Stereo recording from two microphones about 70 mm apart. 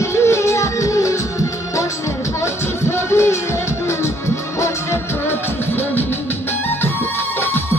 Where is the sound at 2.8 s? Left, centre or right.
Left.